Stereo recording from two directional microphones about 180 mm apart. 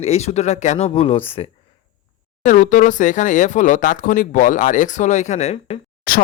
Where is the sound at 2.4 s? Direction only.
40° left (ahead or behind).